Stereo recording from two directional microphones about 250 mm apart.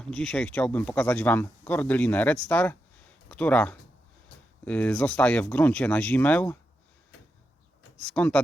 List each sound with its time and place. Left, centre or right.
0.0 s speech: centre
7.9 s speech: centre